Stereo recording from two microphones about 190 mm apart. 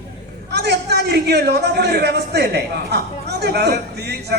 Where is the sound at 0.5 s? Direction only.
60° right (ahead or behind).